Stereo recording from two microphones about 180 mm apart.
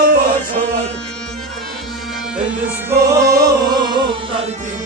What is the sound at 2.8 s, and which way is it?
Music, 15° right (ahead or behind).